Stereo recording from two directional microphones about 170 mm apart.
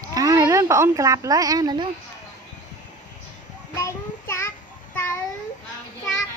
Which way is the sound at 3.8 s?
15° left (ahead or behind).